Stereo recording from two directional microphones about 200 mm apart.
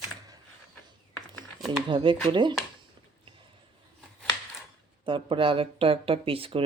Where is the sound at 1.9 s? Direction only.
25° right (ahead or behind).